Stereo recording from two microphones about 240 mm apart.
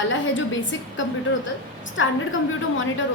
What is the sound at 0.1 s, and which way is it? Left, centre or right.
A woman's voice, left.